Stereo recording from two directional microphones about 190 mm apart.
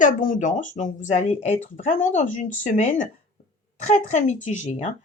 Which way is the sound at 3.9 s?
40° left (ahead or behind).